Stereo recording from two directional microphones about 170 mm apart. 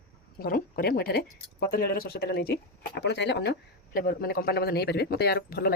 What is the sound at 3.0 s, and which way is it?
Speech, 90° left.